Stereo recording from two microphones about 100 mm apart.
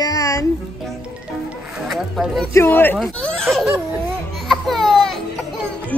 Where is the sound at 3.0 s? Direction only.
Centre (ahead or behind).